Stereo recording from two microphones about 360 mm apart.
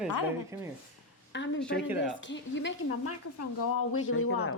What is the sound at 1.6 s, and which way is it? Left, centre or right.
Speech, centre.